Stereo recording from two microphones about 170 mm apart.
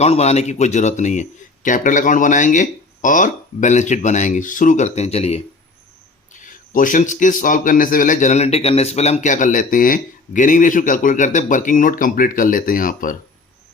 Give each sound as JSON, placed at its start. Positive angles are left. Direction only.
{"t": 0.0, "sound": "a man's voice", "side_deg": 40}
{"t": 6.4, "sound": "a man's voice", "side_deg": 50}